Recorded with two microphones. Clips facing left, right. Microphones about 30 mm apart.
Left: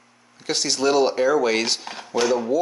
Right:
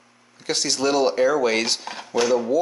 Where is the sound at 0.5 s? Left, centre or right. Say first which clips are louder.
Left 1 dB; centre.